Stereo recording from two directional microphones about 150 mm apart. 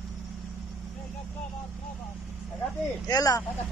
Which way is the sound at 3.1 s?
25° left (ahead or behind).